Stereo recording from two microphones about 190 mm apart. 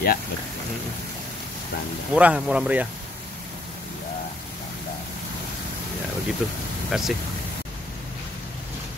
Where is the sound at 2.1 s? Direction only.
5° right (ahead or behind).